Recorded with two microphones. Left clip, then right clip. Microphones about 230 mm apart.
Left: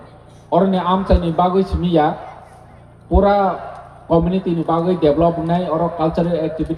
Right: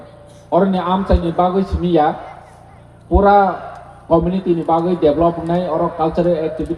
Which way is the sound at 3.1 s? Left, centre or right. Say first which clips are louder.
Right 3 dB; left.